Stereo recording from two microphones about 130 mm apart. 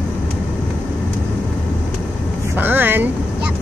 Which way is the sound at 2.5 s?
15° right (ahead or behind).